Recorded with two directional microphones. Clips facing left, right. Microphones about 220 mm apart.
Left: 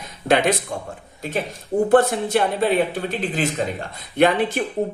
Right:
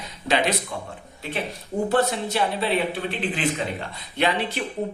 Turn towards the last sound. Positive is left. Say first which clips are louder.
# left 6 dB
turn(degrees=50)  # may be behind; listen again after turning